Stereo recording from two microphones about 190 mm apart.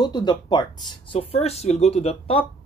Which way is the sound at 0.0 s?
20° left (ahead or behind).